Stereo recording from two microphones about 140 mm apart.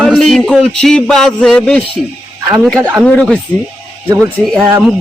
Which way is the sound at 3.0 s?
5° left (ahead or behind).